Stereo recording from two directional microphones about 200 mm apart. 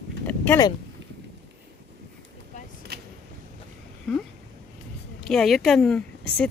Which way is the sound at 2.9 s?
50° right (ahead or behind).